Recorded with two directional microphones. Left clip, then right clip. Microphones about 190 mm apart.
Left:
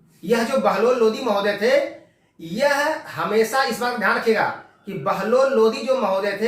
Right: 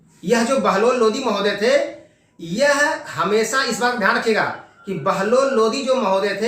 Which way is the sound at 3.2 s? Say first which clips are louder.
Right 1 dB; 20° right (ahead or behind).